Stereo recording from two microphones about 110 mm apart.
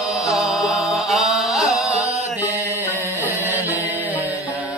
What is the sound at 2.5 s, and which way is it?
Music, 25° left (ahead or behind).